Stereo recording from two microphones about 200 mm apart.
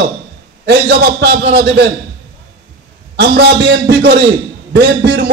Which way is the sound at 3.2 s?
55° right (ahead or behind).